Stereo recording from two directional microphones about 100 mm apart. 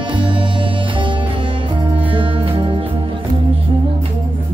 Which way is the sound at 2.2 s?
65° right (ahead or behind).